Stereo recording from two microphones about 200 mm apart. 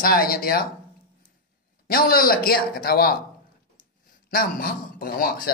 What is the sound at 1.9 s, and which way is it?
Speech, 45° left (ahead or behind).